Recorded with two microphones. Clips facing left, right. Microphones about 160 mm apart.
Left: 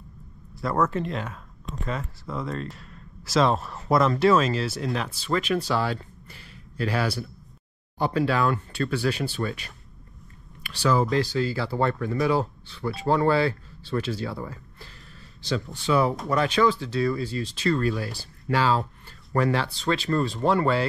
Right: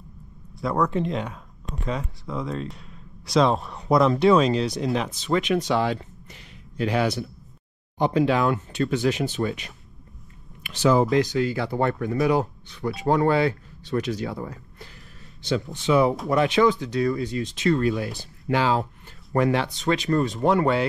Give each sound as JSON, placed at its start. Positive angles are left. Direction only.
{"t": 0.6, "sound": "speech", "side_deg": 0}
{"t": 4.7, "sound": "speech", "side_deg": -20}
{"t": 17.3, "sound": "speech", "side_deg": 30}
{"t": 17.6, "sound": "speech", "side_deg": -20}
{"t": 19.3, "sound": "speech", "side_deg": -20}